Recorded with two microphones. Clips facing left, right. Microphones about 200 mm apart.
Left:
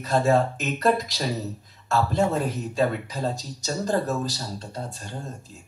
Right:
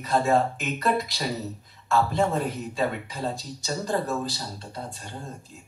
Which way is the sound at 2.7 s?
40° left (ahead or behind).